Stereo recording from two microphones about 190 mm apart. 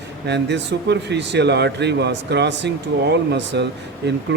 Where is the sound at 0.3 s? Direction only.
65° right (ahead or behind).